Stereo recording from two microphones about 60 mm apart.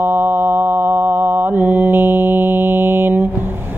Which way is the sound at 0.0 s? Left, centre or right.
Right.